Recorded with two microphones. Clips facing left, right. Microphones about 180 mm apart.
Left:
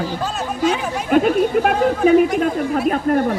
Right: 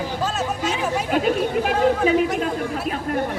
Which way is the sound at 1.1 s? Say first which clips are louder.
Left 7 dB; 50° left (ahead or behind).